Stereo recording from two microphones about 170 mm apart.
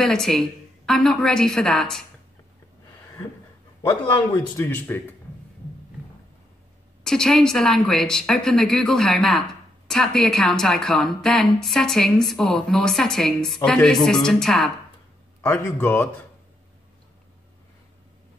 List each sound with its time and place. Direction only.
0.0 s speech: 5° left (ahead or behind)
3.8 s speech: 25° left (ahead or behind)
4.6 s speech: 10° left (ahead or behind)
7.0 s speech: 5° left (ahead or behind)
15.4 s speech: 15° left (ahead or behind)